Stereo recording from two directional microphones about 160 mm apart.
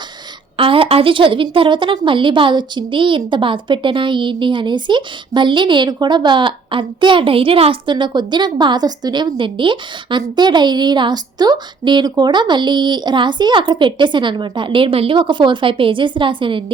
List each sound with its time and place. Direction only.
0.5 s speech: 35° right (ahead or behind)